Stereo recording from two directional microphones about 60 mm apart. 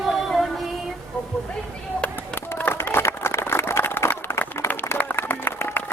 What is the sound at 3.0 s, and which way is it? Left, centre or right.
Run, left.